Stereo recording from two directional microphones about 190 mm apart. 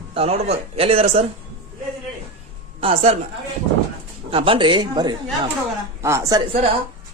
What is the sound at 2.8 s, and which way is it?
Speech, 30° right (ahead or behind).